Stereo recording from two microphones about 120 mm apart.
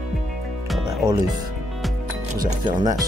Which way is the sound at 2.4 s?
35° right (ahead or behind).